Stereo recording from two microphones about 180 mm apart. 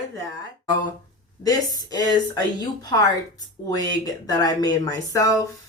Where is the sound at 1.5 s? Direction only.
20° left (ahead or behind).